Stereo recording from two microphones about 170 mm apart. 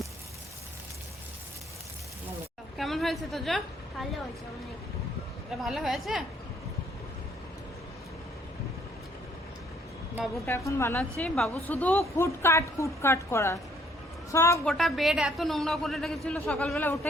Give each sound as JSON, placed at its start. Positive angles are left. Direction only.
{"t": 2.7, "sound": "a sound", "side_deg": 0}
{"t": 5.5, "sound": "speech", "side_deg": 0}
{"t": 10.3, "sound": "a woman's voice", "side_deg": 15}
{"t": 11.3, "sound": "a woman's voice", "side_deg": 5}
{"t": 14.6, "sound": "speech", "side_deg": 0}